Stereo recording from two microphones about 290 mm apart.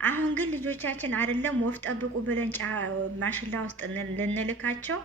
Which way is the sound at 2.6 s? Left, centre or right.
Right.